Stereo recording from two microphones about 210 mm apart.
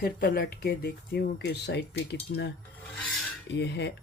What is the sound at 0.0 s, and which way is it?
Speech, 45° left (ahead or behind).